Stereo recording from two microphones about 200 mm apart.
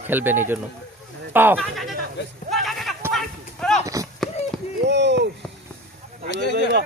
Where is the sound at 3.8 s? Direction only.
15° right (ahead or behind).